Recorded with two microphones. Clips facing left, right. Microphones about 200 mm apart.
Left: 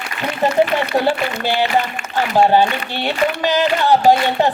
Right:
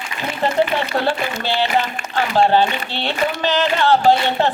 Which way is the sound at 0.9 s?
15° left (ahead or behind).